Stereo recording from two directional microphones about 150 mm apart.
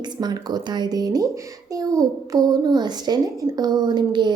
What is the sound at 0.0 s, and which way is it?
A child's voice, 30° right (ahead or behind).